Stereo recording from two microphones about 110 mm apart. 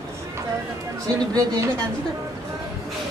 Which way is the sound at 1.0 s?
35° right (ahead or behind).